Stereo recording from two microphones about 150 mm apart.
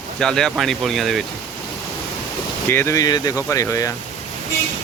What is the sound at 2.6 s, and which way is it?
Speech, 15° left (ahead or behind).